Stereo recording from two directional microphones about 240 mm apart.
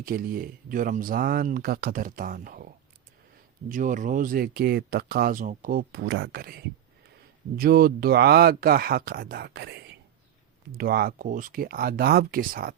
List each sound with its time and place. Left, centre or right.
0.0 s speech: right
3.7 s speech: right